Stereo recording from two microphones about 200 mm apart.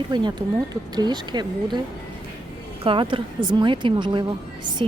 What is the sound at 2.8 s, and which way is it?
Speech, 25° right (ahead or behind).